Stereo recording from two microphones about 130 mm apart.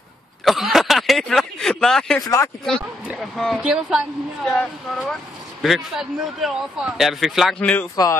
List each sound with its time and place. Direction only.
0.5 s a sound: centre (ahead or behind)
2.2 s speech: 25° left (ahead or behind)
3.2 s speech: centre (ahead or behind)
7.9 s speech: 25° left (ahead or behind)